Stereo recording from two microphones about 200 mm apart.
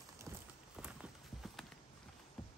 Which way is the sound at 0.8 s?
5° right (ahead or behind).